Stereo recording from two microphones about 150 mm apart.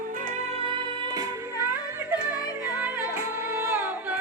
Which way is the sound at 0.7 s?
30° right (ahead or behind).